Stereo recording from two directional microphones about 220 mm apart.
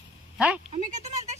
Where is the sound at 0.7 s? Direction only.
30° right (ahead or behind).